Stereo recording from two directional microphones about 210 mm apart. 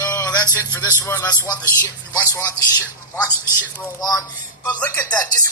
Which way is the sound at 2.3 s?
15° left (ahead or behind).